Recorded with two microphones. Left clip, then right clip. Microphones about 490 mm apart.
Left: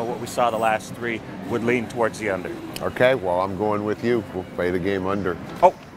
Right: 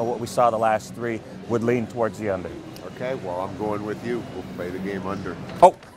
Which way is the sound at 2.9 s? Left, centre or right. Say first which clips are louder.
Left 9 dB; left.